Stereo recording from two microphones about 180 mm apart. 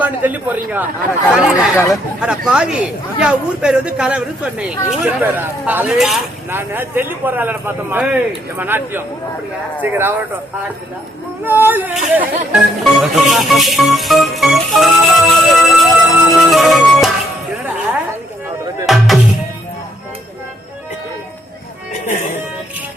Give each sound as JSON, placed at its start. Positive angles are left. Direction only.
{"t": 0.0, "sound": "a man's voice", "side_deg": -10}
{"t": 11.4, "sound": "a man's voice", "side_deg": -10}
{"t": 12.8, "sound": "music", "side_deg": 0}
{"t": 18.9, "sound": "music", "side_deg": 0}
{"t": 22.0, "sound": "music", "side_deg": 40}